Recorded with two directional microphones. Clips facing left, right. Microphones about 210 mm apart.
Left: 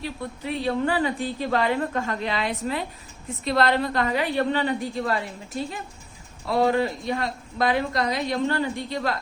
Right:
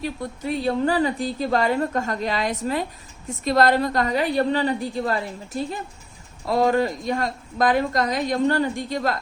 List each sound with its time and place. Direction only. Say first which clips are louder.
0.0 s a woman's voice: right 3 dB; 45° right (ahead or behind)
6.5 s a woman's voice: right 2 dB; 40° right (ahead or behind)